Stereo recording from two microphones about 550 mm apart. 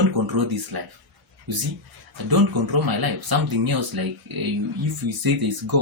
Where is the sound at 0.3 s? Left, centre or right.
Right.